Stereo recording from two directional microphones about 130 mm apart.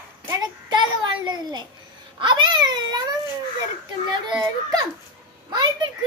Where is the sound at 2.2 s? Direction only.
35° right (ahead or behind).